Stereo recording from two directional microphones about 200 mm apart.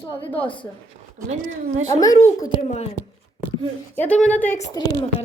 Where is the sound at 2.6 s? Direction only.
30° left (ahead or behind).